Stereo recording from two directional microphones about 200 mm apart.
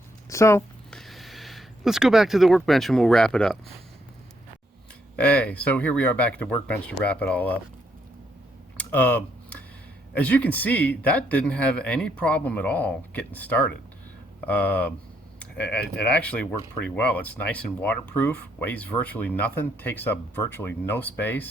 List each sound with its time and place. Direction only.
0.3 s a sound: 15° left (ahead or behind)
0.9 s speech: centre (ahead or behind)
5.1 s speech: 5° left (ahead or behind)
8.8 s speech: 10° left (ahead or behind)
15.4 s a sound: 5° left (ahead or behind)
16.0 s speech: 5° left (ahead or behind)